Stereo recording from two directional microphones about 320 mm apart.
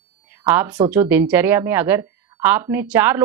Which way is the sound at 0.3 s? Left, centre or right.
Centre.